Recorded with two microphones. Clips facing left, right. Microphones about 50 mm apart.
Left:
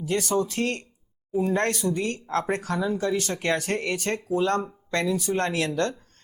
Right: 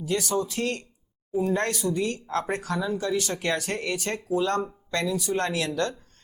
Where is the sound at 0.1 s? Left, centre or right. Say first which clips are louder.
Left 2 dB; left.